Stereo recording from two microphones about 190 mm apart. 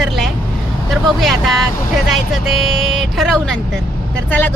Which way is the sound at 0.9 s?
Centre (ahead or behind).